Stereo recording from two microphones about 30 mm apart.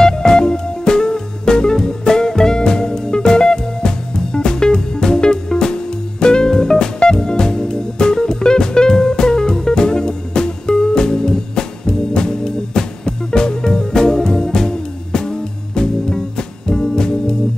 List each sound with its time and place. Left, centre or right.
0.0 s music: left